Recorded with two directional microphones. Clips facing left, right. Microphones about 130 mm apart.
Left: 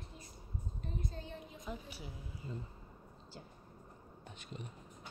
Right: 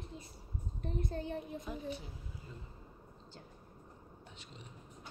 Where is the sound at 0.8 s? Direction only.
60° right (ahead or behind).